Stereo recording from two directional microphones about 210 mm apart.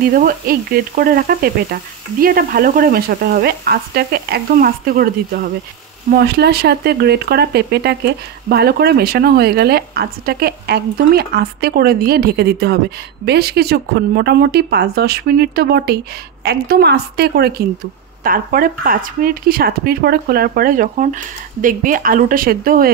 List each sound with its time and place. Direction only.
0.0 s speech: 45° right (ahead or behind)